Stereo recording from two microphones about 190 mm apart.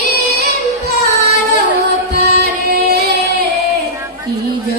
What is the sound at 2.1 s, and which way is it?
Music, 60° right (ahead or behind).